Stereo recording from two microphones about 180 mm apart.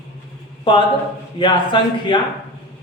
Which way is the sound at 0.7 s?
30° left (ahead or behind).